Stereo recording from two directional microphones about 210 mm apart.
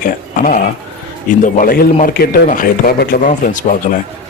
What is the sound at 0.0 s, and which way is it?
A man's voice, 40° left (ahead or behind).